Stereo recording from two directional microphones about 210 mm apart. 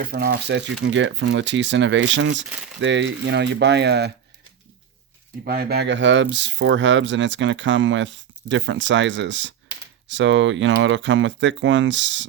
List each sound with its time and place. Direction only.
0.0 s speech: 45° right (ahead or behind)
5.5 s speech: 50° right (ahead or behind)